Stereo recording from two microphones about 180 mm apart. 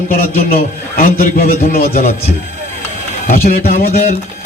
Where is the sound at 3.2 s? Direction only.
55° left (ahead or behind).